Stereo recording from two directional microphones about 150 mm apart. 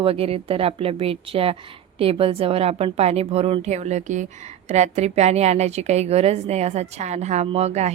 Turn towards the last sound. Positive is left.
turn(degrees=-45)  # may be behind; listen again after turning